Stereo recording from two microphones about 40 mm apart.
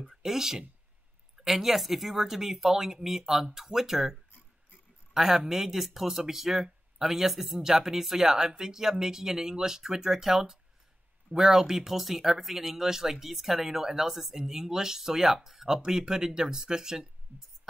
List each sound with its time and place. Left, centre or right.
0.2 s speech: centre
17.3 s speech: right